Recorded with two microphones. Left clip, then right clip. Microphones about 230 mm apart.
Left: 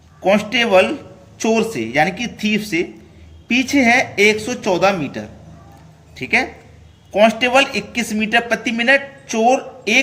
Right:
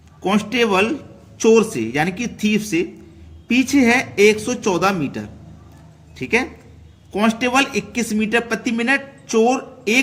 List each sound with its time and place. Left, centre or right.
0.2 s speech: right